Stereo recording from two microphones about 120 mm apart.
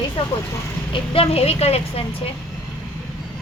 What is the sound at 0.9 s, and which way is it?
A woman's voice, 55° left (ahead or behind).